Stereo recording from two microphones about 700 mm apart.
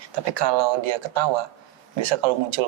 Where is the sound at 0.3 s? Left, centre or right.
Right.